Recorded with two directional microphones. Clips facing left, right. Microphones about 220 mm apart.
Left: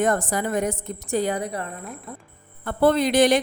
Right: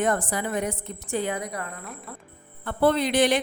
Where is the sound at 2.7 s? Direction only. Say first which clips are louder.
Left 3 dB; 45° left (ahead or behind).